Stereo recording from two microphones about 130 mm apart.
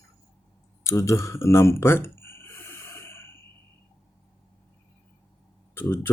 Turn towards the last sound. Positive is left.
turn(degrees=15)  # may be behind; listen again after turning